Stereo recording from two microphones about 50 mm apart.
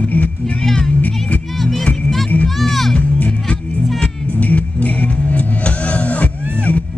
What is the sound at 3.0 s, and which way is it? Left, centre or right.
Music, left.